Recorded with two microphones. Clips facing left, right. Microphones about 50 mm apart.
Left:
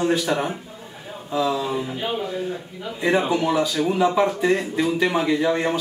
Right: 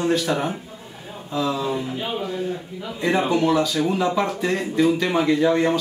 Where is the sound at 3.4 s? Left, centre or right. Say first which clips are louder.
Right 2 dB; centre.